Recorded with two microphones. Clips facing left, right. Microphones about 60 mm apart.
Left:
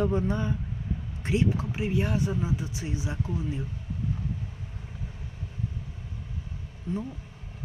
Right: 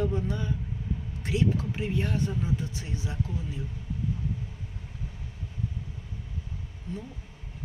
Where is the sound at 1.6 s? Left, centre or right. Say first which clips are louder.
Left 2 dB; centre.